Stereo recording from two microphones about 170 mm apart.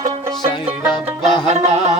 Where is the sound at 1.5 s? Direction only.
40° right (ahead or behind).